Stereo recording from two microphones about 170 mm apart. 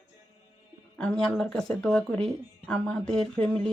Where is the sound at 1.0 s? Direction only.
5° left (ahead or behind).